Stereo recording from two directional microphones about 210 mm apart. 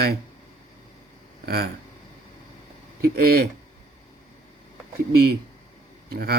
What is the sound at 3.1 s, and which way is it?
Speech, 45° right (ahead or behind).